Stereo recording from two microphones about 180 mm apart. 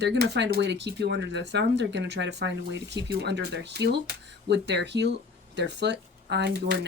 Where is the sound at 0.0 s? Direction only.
70° right (ahead or behind).